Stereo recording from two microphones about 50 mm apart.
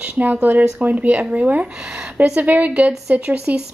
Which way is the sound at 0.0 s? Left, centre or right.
Right.